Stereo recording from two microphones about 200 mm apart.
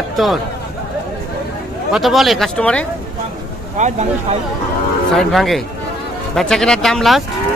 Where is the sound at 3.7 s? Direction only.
35° right (ahead or behind).